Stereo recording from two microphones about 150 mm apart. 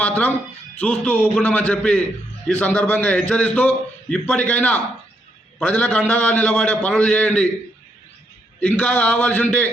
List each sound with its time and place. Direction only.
0.0 s music: 10° left (ahead or behind)
0.8 s a man's voice: 10° left (ahead or behind)
8.6 s a man's voice: 10° left (ahead or behind)